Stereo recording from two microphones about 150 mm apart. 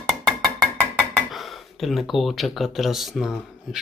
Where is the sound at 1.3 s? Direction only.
Centre (ahead or behind).